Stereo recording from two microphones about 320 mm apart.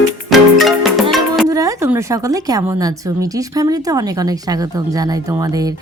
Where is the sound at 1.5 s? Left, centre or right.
Centre.